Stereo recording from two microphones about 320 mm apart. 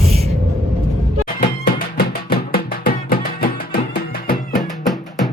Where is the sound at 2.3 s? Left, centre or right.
Left.